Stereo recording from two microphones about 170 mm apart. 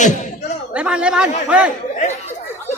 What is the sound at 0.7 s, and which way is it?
Speech, 5° right (ahead or behind).